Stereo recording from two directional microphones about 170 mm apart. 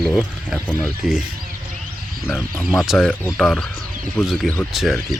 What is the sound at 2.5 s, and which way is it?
Speech, 15° left (ahead or behind).